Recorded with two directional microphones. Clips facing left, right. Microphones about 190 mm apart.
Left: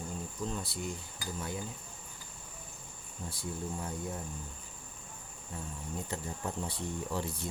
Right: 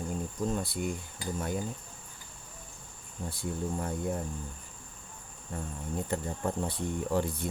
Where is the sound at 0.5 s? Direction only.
55° right (ahead or behind).